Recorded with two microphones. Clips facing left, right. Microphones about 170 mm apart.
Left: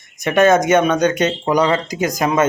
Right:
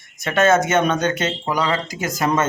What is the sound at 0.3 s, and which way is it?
A man's voice, 15° left (ahead or behind).